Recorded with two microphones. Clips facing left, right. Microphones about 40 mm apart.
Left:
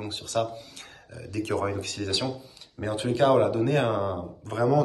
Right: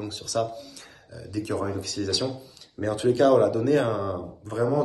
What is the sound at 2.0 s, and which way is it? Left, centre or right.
Speech, left.